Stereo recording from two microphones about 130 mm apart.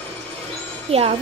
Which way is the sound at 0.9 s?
50° right (ahead or behind).